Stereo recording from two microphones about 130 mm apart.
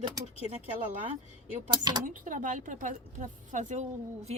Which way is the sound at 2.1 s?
90° right.